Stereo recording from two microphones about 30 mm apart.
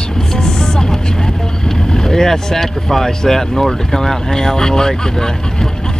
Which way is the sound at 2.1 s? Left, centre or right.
Centre.